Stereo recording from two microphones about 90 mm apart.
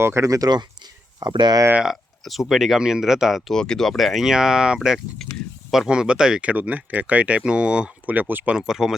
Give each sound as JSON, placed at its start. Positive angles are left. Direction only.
{"t": 0.0, "sound": "speech", "side_deg": -30}
{"t": 1.8, "sound": "speech", "side_deg": 0}
{"t": 5.1, "sound": "speech", "side_deg": 5}
{"t": 5.7, "sound": "speech", "side_deg": -5}
{"t": 8.5, "sound": "speech", "side_deg": -5}